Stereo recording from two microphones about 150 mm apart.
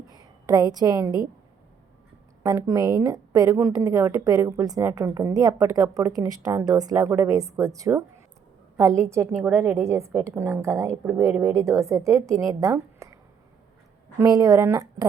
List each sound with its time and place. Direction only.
0.1 s a woman's voice: 25° right (ahead or behind)
2.4 s a woman's voice: 20° right (ahead or behind)
14.2 s a woman's voice: 25° right (ahead or behind)